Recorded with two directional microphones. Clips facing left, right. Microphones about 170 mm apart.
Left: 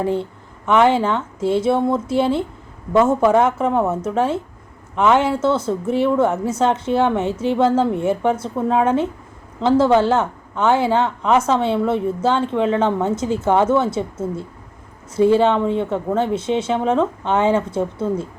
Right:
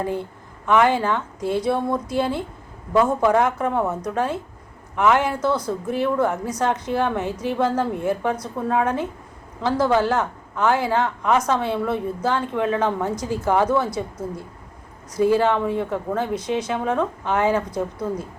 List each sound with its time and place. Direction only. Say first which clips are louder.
0.0 s speech: left 5 dB; 25° left (ahead or behind)